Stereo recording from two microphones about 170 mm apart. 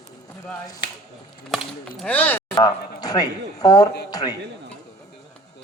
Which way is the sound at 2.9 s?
25° left (ahead or behind).